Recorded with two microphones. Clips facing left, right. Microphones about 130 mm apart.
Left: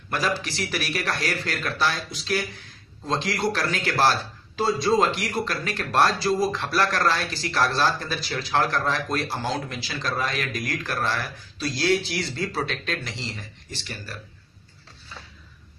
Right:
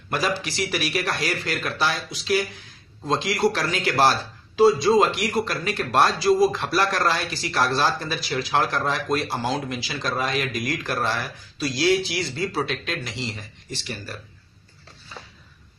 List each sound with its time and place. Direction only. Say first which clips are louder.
0.1 s speech: right 1 dB; 15° right (ahead or behind)